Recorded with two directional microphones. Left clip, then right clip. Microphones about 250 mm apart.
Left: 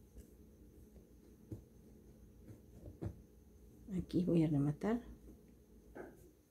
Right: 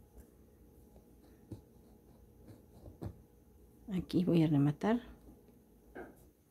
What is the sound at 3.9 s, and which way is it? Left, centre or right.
Speech, right.